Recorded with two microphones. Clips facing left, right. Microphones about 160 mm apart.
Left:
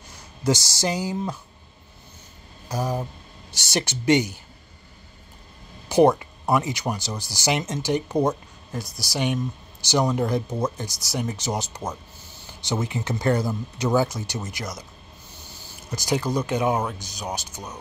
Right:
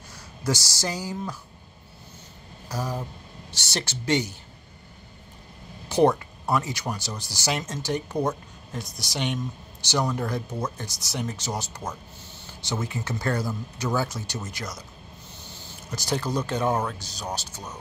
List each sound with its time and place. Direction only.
0.4 s speech: 20° left (ahead or behind)
2.7 s speech: 15° left (ahead or behind)
5.9 s speech: 10° left (ahead or behind)
8.7 s speech: 5° left (ahead or behind)
15.9 s speech: 15° left (ahead or behind)